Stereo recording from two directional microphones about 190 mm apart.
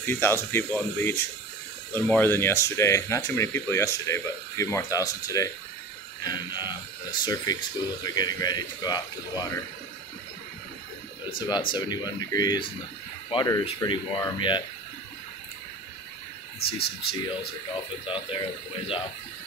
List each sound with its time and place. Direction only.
0.0 s speech: 10° left (ahead or behind)
11.2 s speech: 25° left (ahead or behind)
16.5 s speech: 55° left (ahead or behind)
18.0 s speech: 25° left (ahead or behind)